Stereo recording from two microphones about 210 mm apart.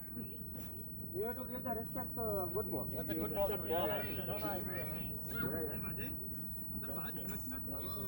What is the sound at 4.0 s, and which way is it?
Speech, 50° right (ahead or behind).